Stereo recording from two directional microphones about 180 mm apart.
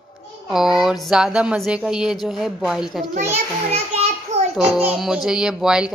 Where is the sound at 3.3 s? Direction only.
35° right (ahead or behind).